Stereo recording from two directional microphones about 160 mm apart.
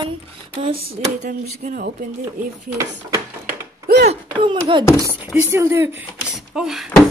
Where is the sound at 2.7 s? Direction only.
20° right (ahead or behind).